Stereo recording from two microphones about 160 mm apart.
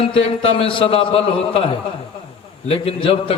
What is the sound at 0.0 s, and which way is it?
A man's voice, 35° left (ahead or behind).